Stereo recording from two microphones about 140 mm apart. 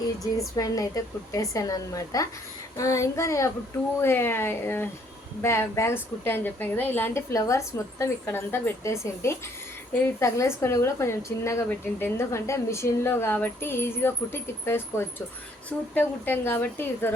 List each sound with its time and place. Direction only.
0.2 s speech: 25° left (ahead or behind)